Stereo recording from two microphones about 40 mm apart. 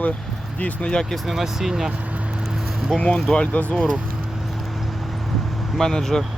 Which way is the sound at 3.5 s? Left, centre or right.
Left.